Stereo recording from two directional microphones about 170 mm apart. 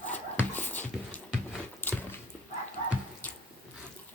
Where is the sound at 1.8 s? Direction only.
10° left (ahead or behind).